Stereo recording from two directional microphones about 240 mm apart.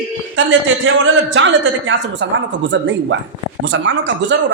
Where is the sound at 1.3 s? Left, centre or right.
Right.